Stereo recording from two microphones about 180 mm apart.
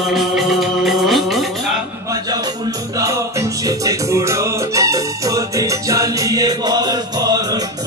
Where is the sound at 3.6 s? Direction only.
20° right (ahead or behind).